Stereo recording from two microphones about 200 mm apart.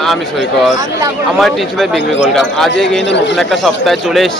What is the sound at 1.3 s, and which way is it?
Speech, centre (ahead or behind).